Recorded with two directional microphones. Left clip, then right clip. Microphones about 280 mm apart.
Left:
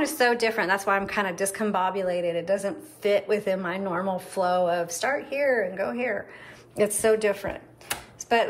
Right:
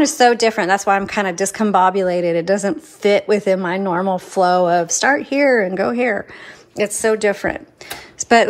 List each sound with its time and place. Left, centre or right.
0.0 s a woman's voice: centre
8.2 s computer keyboard: right